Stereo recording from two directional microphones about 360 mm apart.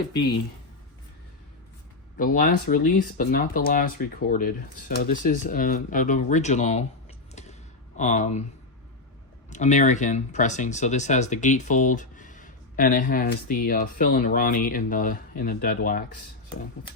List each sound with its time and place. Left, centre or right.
2.1 s speech: left
7.9 s speech: centre
9.5 s speech: centre